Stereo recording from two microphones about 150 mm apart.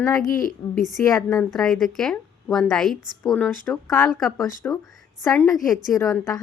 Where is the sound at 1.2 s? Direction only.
5° left (ahead or behind).